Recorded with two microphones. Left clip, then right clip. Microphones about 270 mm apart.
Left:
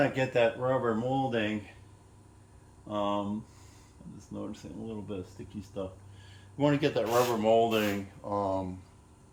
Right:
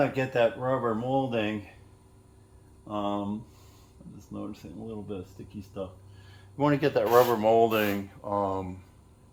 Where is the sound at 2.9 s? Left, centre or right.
Centre.